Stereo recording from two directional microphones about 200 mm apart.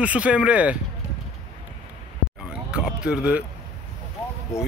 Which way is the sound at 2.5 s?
5° right (ahead or behind).